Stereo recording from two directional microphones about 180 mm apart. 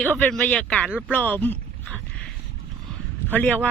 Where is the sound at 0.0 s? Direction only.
10° left (ahead or behind).